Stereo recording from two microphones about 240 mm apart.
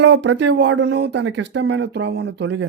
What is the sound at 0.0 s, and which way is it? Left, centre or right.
Speech, right.